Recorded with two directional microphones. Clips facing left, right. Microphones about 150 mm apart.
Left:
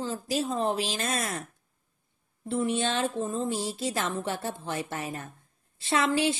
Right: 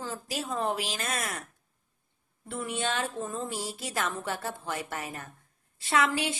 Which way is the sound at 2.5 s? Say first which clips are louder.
Left 5 dB; 25° left (ahead or behind).